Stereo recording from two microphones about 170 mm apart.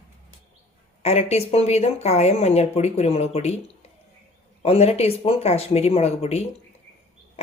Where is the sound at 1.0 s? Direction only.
40° left (ahead or behind).